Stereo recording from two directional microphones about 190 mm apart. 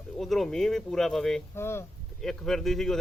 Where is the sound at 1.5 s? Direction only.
15° left (ahead or behind).